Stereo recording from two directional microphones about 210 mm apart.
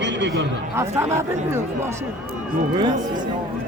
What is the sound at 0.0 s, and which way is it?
Chatter, 55° right (ahead or behind).